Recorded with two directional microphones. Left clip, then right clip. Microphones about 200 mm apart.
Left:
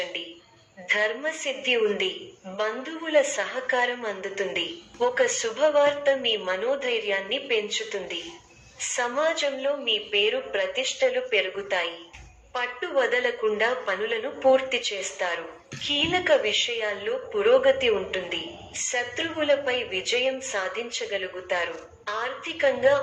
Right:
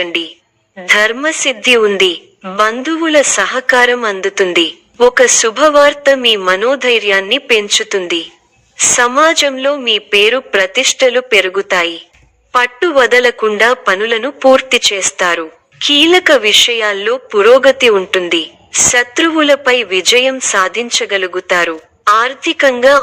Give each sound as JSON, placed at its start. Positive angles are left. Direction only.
{"t": 0.0, "sound": "a woman's voice", "side_deg": -50}